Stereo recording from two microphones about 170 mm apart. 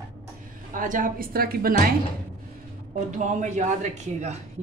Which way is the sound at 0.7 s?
50° right (ahead or behind).